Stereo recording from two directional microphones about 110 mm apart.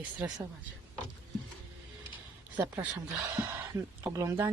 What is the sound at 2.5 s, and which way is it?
Speech, 15° right (ahead or behind).